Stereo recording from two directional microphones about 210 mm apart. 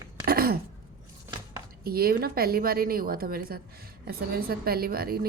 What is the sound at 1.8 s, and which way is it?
A woman's voice, 45° right (ahead or behind).